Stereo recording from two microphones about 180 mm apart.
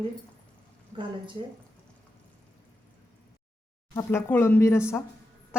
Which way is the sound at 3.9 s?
15° left (ahead or behind).